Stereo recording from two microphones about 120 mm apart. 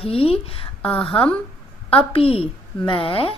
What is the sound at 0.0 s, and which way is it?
Speech, 55° left (ahead or behind).